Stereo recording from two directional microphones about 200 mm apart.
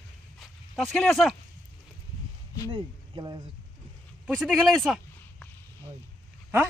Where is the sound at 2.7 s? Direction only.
20° right (ahead or behind).